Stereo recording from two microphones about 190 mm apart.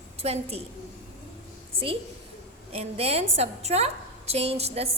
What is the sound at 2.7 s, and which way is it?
A woman's voice, 30° right (ahead or behind).